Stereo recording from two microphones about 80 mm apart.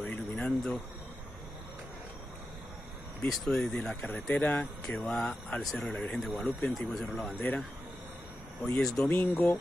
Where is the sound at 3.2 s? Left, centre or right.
Centre.